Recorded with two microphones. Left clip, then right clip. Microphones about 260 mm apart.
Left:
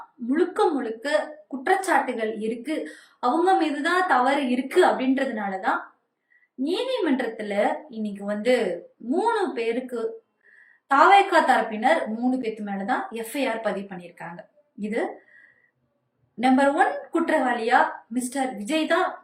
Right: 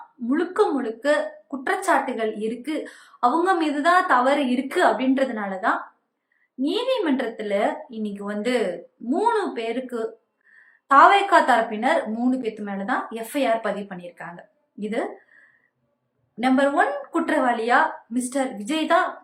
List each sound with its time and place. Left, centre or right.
0.3 s a woman's voice: centre
16.4 s a woman's voice: centre